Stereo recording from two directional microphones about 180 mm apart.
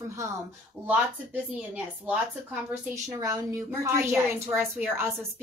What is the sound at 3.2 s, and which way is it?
A woman's voice, 20° right (ahead or behind).